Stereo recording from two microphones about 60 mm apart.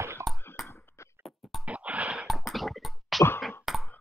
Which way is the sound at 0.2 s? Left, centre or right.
Right.